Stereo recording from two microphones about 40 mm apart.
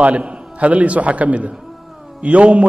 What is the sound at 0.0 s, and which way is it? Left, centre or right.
A man's voice, right.